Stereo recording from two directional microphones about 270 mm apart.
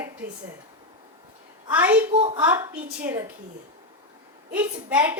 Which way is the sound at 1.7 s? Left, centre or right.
Centre.